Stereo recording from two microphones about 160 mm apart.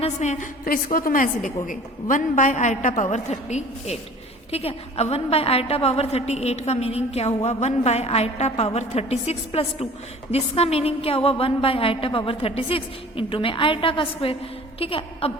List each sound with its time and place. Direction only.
0.0 s a woman's voice: 50° left (ahead or behind)